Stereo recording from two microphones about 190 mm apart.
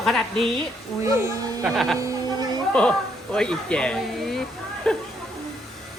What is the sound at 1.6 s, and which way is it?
Speech, centre (ahead or behind).